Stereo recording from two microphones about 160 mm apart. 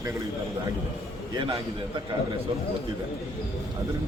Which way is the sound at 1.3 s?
25° right (ahead or behind).